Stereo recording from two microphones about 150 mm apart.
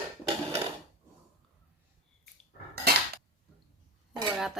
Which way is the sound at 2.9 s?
90° right.